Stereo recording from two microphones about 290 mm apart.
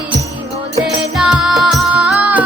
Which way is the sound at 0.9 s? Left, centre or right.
Centre.